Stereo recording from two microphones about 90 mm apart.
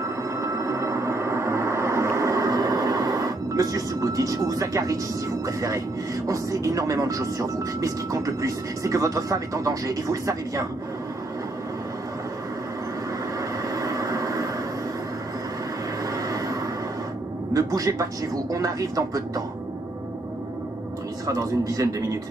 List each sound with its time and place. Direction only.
0.4 s music: 35° right (ahead or behind)
6.2 s speech: 40° right (ahead or behind)
13.4 s vehicle: 40° right (ahead or behind)
16.1 s vehicle: 40° right (ahead or behind)
17.6 s speech: 40° right (ahead or behind)
21.3 s speech: 40° right (ahead or behind)